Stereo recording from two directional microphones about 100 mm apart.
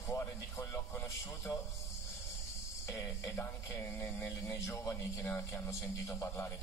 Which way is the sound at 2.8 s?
35° left (ahead or behind).